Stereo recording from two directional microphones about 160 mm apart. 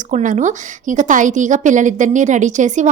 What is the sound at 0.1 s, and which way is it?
A woman's voice, 50° right (ahead or behind).